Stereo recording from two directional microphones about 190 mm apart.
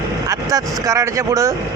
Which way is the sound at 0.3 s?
15° right (ahead or behind).